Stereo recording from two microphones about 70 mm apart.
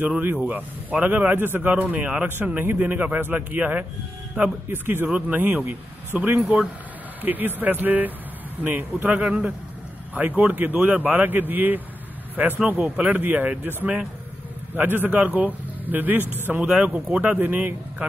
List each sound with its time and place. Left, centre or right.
0.0 s speech: right
14.8 s speech: right